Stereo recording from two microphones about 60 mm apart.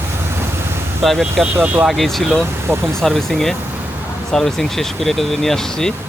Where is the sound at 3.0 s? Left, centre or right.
Centre.